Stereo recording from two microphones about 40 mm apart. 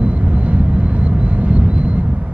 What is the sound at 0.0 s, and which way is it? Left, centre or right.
Vehicle, right.